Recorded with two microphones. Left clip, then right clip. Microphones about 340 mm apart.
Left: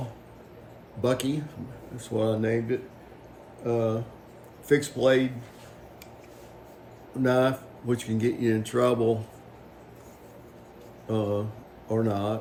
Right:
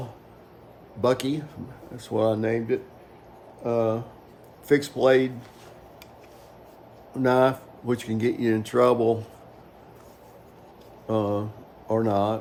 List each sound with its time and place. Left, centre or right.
1.0 s speech: centre
7.2 s speech: centre
11.1 s speech: centre